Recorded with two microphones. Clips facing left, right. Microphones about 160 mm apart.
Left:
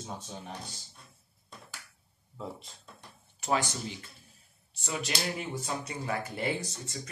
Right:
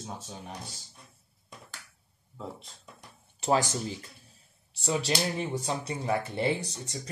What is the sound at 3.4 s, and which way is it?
Speech, 35° right (ahead or behind).